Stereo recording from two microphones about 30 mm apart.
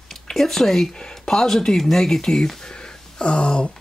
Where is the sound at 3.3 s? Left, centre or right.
Left.